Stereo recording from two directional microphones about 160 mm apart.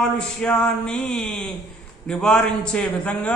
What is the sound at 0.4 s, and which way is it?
A man's voice, 5° left (ahead or behind).